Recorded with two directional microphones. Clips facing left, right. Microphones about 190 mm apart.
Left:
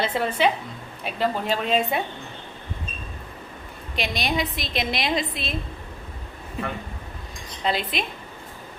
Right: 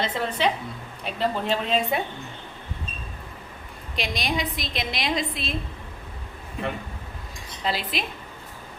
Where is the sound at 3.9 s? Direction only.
Centre (ahead or behind).